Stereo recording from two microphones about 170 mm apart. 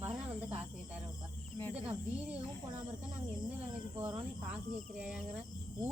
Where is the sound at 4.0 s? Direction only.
10° right (ahead or behind).